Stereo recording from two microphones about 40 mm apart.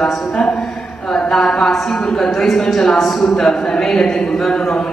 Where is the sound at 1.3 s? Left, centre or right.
Centre.